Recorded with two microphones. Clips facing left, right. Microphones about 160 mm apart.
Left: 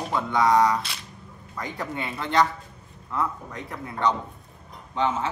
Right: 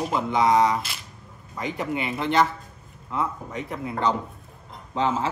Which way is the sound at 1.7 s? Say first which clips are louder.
Right 4 dB; 20° right (ahead or behind).